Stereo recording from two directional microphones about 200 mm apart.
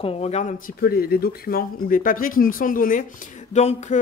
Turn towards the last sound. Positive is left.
turn(degrees=35)  # may be behind; listen again after turning